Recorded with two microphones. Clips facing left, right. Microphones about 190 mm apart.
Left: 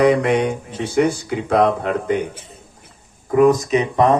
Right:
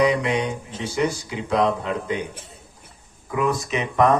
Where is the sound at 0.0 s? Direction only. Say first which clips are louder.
Left 5 dB; 55° left (ahead or behind).